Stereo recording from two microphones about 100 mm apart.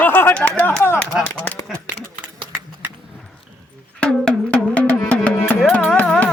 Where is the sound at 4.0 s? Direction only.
5° left (ahead or behind).